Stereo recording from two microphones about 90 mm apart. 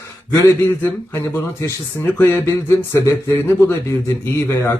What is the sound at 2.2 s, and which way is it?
Speech, 25° left (ahead or behind).